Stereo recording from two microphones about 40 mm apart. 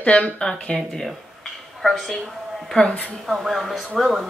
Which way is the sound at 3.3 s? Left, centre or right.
Centre.